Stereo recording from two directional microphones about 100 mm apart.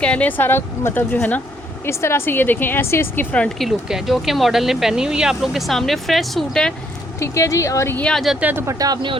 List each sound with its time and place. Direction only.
0.0 s a woman's voice: 15° left (ahead or behind)
3.3 s speech: 10° left (ahead or behind)
3.7 s speech: 5° right (ahead or behind)
7.2 s speech: 30° left (ahead or behind)
7.9 s speech: 10° left (ahead or behind)
8.4 s speech: 15° right (ahead or behind)
8.6 s speech: 40° right (ahead or behind)